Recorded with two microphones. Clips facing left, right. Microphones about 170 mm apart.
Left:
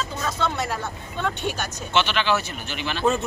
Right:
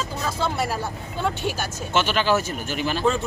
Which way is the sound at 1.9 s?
45° right (ahead or behind).